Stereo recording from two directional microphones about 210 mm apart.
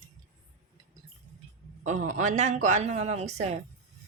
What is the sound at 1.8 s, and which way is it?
Speech, 35° right (ahead or behind).